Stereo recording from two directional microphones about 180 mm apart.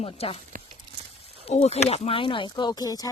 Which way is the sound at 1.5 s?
35° left (ahead or behind).